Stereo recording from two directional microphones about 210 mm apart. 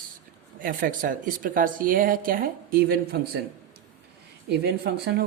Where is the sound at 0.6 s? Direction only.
40° right (ahead or behind).